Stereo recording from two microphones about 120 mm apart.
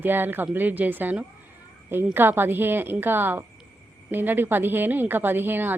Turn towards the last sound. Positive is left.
turn(degrees=-15)  # may be behind; listen again after turning